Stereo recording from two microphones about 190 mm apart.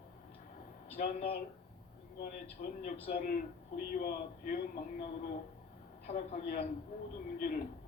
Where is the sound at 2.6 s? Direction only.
45° left (ahead or behind).